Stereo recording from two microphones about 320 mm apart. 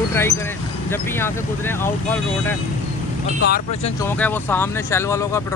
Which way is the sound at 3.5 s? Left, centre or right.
Centre.